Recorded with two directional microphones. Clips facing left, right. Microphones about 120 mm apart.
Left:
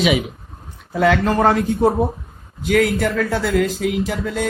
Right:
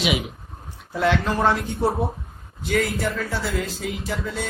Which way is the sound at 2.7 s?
55° left (ahead or behind).